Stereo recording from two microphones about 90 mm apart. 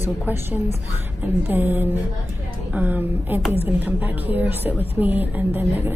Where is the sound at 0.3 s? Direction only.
25° right (ahead or behind).